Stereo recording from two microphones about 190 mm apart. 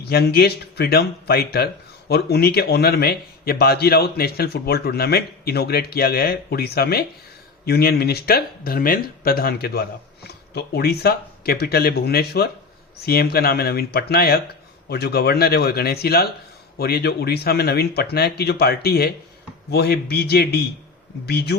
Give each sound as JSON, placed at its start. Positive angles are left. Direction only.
{"t": 0.0, "sound": "speech", "side_deg": 55}